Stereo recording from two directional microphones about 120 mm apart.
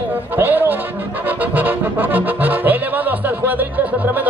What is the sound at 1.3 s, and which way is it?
Music, 15° right (ahead or behind).